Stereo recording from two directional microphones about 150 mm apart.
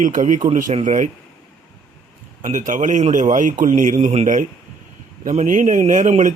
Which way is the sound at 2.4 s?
55° right (ahead or behind).